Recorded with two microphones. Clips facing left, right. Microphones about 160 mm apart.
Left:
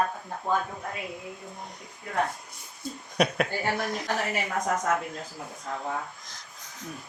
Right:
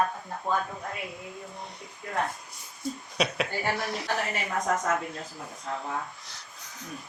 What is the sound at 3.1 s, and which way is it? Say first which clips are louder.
Speech: left 4 dB; 50° left (ahead or behind).